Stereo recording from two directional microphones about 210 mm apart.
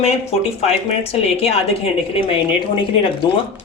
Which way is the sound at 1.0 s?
30° left (ahead or behind).